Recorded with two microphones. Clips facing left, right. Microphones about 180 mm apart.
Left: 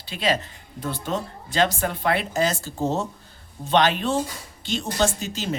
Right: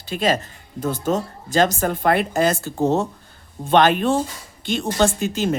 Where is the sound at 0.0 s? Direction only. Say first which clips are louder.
Right 4 dB; 45° right (ahead or behind).